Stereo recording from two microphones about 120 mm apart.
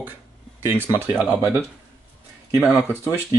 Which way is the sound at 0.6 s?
15° right (ahead or behind).